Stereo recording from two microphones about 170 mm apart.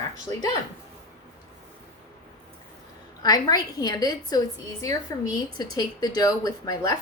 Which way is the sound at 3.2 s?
20° left (ahead or behind).